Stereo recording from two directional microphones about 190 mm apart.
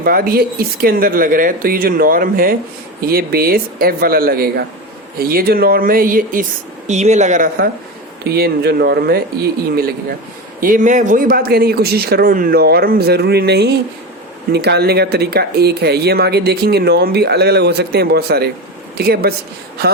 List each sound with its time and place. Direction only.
0.0 s speech: 50° right (ahead or behind)
8.2 s speech: 55° right (ahead or behind)